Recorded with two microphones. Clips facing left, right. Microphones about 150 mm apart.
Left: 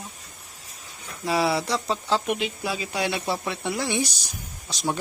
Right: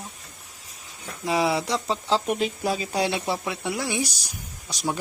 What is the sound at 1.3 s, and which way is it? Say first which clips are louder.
Speech: even; 15° right (ahead or behind).